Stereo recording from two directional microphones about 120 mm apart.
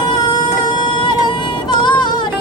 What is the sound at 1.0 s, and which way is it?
Music, 40° left (ahead or behind).